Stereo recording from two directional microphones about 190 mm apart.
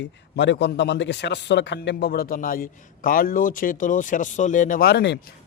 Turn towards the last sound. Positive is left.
turn(degrees=60)  # may be behind; listen again after turning